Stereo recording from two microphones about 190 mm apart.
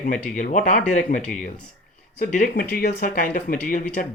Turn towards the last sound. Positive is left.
turn(degrees=45)  # may be behind; listen again after turning